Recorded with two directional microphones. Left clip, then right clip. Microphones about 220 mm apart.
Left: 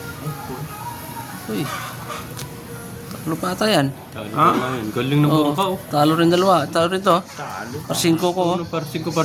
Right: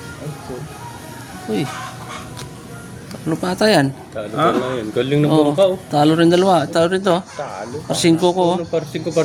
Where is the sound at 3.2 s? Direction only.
20° right (ahead or behind).